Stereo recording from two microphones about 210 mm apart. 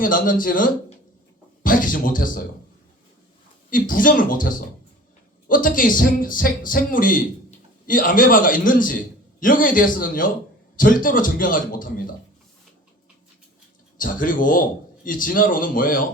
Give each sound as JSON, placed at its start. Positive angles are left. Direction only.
{"t": 0.0, "sound": "a man's voice", "side_deg": 40}
{"t": 3.7, "sound": "a man's voice", "side_deg": 40}
{"t": 14.0, "sound": "a man's voice", "side_deg": 40}